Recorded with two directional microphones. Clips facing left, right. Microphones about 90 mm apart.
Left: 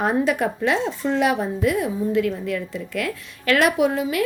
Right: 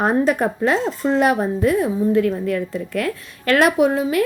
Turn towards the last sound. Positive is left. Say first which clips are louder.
# right 3 dB
turn(degrees=-45)  # may be behind; listen again after turning